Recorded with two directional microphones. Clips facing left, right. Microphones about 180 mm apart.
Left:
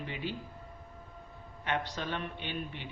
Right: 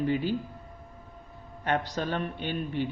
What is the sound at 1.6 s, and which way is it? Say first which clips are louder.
Speech: right 6 dB; 40° right (ahead or behind).